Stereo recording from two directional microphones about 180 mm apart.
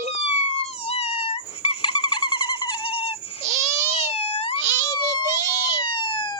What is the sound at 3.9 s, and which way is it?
Wail, 35° left (ahead or behind).